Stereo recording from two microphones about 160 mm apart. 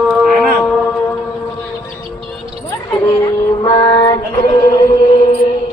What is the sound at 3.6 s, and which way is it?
Music, 25° left (ahead or behind).